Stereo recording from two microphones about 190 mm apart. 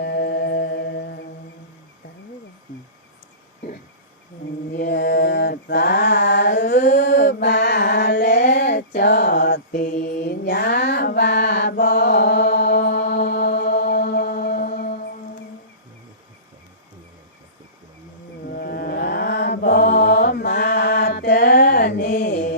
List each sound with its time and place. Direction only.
0.0 s music: 60° left (ahead or behind)
4.7 s mantra: 60° left (ahead or behind)
13.6 s music: 60° left (ahead or behind)
18.5 s mantra: 55° left (ahead or behind)